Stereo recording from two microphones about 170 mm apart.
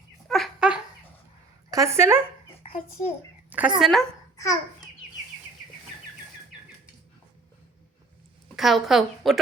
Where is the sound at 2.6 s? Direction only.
40° left (ahead or behind).